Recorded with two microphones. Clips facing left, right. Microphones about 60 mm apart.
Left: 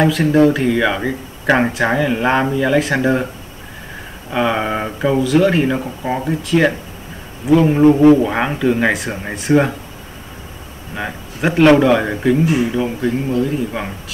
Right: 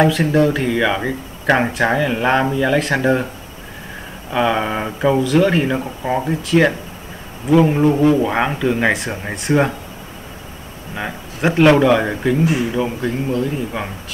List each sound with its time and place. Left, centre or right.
0.0 s speech: centre
4.3 s speech: centre
7.8 s speech: centre
8.2 s speech: centre
11.0 s speech: centre